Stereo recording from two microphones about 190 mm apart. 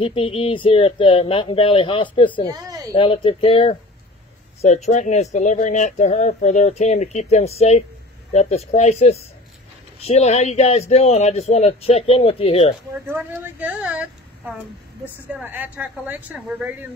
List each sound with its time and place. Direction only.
0.0 s speech: 30° left (ahead or behind)
2.6 s a sound: 15° right (ahead or behind)
2.9 s speech: 25° left (ahead or behind)
13.0 s a woman's voice: 10° right (ahead or behind)